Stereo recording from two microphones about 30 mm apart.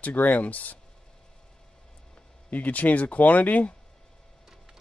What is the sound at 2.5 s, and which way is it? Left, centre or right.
Speech, left.